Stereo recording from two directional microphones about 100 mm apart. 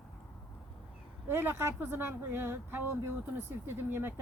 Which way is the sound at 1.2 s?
25° right (ahead or behind).